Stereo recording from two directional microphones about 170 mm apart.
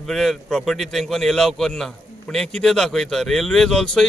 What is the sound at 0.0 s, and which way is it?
Speech, centre (ahead or behind).